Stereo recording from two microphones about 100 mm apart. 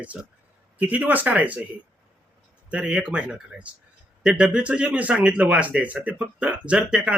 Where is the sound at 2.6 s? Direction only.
10° right (ahead or behind).